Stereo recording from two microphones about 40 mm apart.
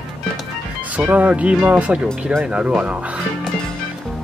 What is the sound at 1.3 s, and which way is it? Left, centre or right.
Speech, right.